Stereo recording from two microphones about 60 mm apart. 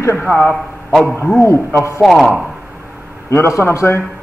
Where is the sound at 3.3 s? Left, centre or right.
Left.